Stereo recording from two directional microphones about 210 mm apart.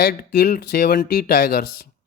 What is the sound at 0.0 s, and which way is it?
Speech, 45° left (ahead or behind).